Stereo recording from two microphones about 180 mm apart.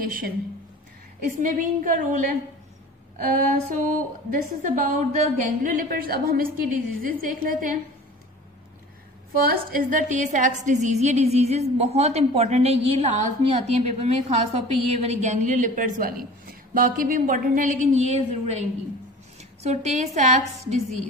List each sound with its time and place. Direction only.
1.4 s a woman's voice: 45° right (ahead or behind)
3.3 s a woman's voice: 40° right (ahead or behind)
4.3 s a woman's voice: 50° right (ahead or behind)
9.3 s a woman's voice: 55° right (ahead or behind)